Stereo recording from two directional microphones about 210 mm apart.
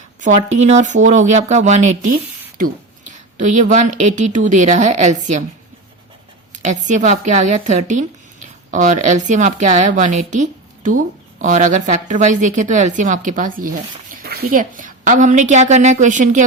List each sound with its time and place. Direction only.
0.5 s a woman's voice: 35° right (ahead or behind)
6.5 s a woman's voice: 35° right (ahead or behind)